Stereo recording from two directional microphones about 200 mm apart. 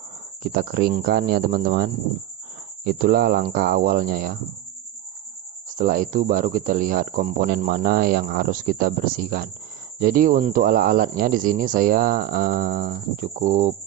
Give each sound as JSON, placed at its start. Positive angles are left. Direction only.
{"t": 0.4, "sound": "speech", "side_deg": -50}
{"t": 5.7, "sound": "speech", "side_deg": -45}